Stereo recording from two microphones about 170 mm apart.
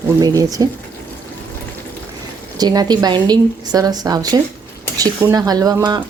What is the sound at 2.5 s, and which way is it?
A woman's voice, 25° right (ahead or behind).